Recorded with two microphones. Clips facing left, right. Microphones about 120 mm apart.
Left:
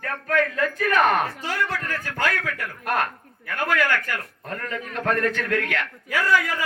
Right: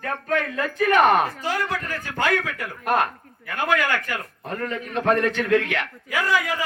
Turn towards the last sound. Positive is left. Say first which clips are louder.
# left 1 dB
turn(degrees=-20)  # may be behind; listen again after turning